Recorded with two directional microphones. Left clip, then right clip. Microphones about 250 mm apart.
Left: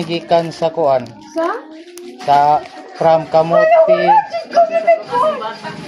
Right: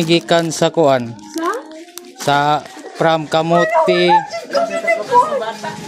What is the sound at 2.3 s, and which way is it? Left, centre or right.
Speech, right.